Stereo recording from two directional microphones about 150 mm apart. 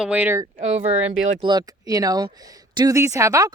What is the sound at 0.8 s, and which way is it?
Speech, 40° right (ahead or behind).